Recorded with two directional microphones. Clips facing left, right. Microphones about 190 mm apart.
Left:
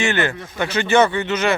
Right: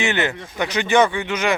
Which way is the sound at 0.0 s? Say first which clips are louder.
Left 1 dB; 20° right (ahead or behind).